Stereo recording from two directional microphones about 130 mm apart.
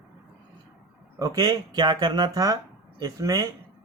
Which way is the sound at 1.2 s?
30° right (ahead or behind).